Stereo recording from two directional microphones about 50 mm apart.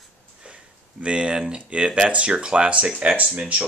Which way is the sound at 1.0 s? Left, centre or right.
Centre.